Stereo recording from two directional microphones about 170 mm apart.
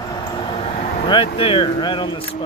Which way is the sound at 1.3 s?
30° left (ahead or behind).